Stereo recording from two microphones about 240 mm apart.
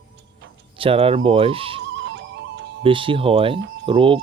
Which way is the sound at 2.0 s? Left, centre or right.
Right.